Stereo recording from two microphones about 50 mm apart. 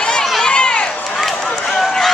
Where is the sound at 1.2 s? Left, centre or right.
Centre.